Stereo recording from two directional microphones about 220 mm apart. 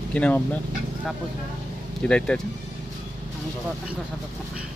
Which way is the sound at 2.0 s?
5° left (ahead or behind).